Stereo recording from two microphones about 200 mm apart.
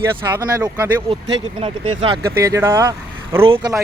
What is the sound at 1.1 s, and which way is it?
Speech, 30° right (ahead or behind).